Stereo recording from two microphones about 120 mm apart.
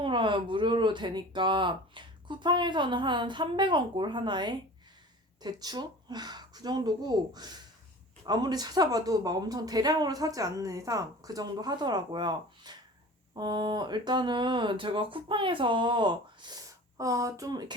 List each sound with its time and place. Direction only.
0.0 s speech: 45° right (ahead or behind)
17.0 s speech: 25° right (ahead or behind)